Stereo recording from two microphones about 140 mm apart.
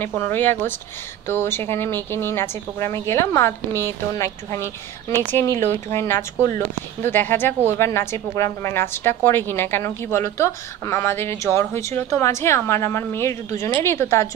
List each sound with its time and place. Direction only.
0.0 s a woman's voice: 15° left (ahead or behind)